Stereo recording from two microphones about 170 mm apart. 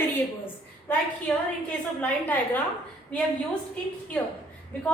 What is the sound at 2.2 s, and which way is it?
Speech, 10° left (ahead or behind).